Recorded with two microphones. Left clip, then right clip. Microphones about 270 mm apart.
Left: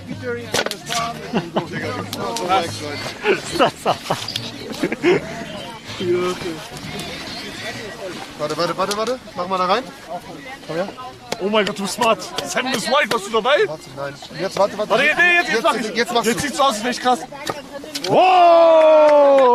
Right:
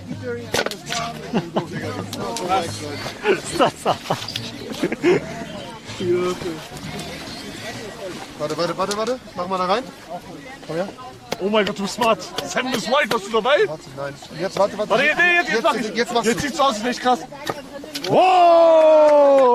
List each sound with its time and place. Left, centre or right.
0.3 s speech: centre
8.4 s speech: centre
11.3 s speech: centre